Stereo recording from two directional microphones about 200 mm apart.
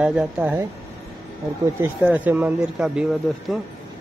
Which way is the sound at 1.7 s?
10° right (ahead or behind).